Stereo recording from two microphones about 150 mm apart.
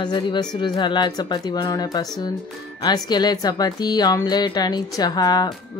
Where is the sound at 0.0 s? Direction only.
30° left (ahead or behind).